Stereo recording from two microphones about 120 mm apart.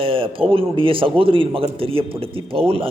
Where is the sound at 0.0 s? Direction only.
50° right (ahead or behind).